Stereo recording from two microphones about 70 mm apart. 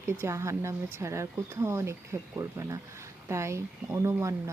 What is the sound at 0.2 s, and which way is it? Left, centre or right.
Speech, right.